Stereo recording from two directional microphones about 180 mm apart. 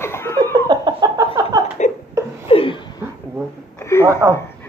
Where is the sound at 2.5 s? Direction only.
30° left (ahead or behind).